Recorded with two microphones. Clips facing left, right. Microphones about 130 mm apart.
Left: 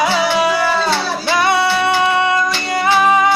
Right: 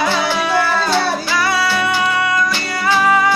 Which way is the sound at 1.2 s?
25° left (ahead or behind).